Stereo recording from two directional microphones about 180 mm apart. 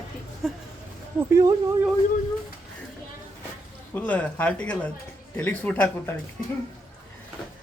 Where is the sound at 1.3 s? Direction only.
20° right (ahead or behind).